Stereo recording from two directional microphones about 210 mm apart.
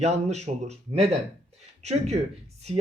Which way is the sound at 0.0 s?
30° right (ahead or behind).